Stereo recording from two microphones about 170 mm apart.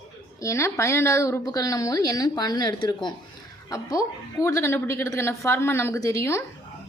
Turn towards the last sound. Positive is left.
turn(degrees=15)  # may be behind; listen again after turning